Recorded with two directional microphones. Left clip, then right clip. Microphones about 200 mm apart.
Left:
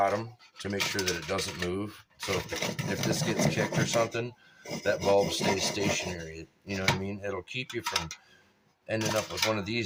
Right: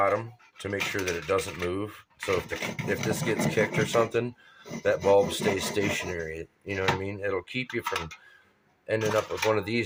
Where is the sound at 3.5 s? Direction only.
50° right (ahead or behind).